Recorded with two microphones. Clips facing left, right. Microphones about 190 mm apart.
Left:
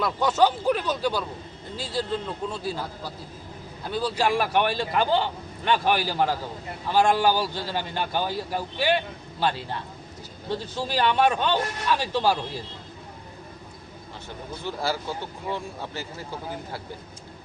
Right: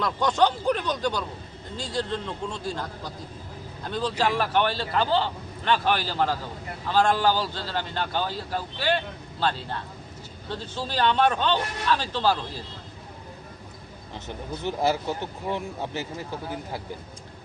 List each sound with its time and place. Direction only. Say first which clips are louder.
0.0 s a man's voice: left 1 dB; 5° left (ahead or behind)
14.3 s speech: right 3 dB; 20° right (ahead or behind)